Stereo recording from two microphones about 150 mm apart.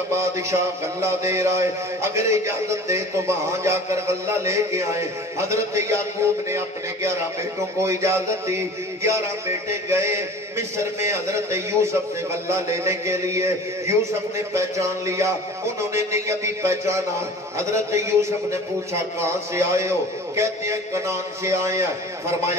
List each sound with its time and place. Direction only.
1.0 s a man's voice: 20° right (ahead or behind)
9.8 s a man's voice: 20° right (ahead or behind)